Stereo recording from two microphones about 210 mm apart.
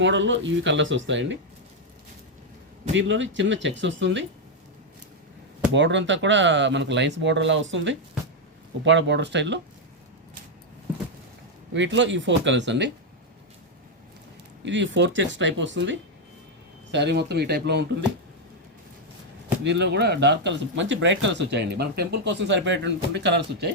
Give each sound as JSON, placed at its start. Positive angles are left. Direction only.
{"t": 0.0, "sound": "speech", "side_deg": -60}
{"t": 2.9, "sound": "speech", "side_deg": -60}
{"t": 5.7, "sound": "speech", "side_deg": -60}
{"t": 11.7, "sound": "speech", "side_deg": -60}
{"t": 14.6, "sound": "speech", "side_deg": -60}
{"t": 19.6, "sound": "speech", "side_deg": -55}